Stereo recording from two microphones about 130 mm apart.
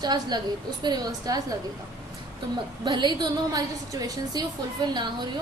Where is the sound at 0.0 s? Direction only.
35° right (ahead or behind).